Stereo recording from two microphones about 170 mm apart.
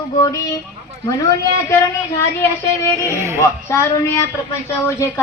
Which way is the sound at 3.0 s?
15° right (ahead or behind).